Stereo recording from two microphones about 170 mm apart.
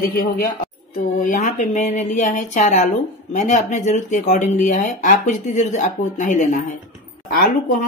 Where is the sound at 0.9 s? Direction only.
50° left (ahead or behind).